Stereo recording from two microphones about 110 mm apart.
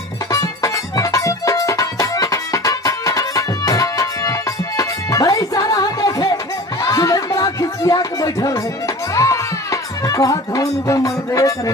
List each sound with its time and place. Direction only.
0.3 s music: 30° left (ahead or behind)